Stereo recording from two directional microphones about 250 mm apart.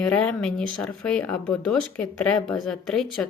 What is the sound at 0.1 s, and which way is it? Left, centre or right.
Speech, centre.